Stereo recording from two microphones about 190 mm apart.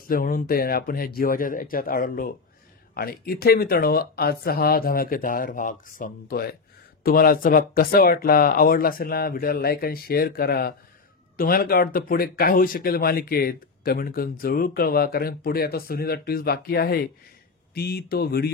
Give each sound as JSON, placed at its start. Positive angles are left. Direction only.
{"t": 0.1, "sound": "speech", "side_deg": 45}